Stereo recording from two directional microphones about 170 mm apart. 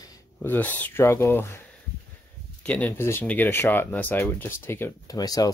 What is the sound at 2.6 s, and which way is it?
Speech, 10° left (ahead or behind).